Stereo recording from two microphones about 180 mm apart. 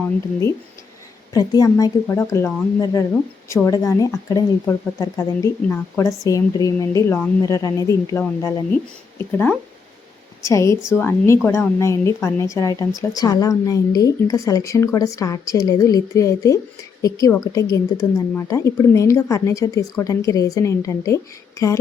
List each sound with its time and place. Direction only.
1.3 s a woman's voice: 20° left (ahead or behind)